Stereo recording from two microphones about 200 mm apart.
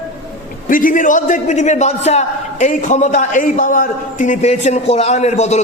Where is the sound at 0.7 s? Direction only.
40° left (ahead or behind).